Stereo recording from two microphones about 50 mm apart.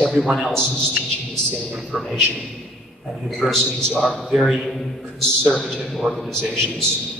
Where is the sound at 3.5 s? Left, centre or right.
Centre.